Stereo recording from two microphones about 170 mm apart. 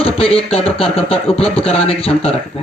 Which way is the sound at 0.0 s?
35° left (ahead or behind).